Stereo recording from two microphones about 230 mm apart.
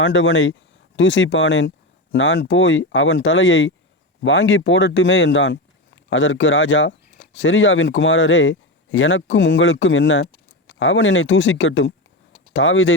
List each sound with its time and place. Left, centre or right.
0.0 s speech: left